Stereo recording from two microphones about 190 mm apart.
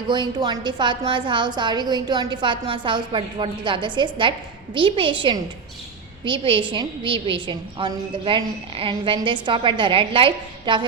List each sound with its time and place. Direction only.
0.1 s a woman's voice: 25° right (ahead or behind)